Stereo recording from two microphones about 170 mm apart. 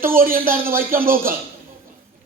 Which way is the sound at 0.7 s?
55° right (ahead or behind).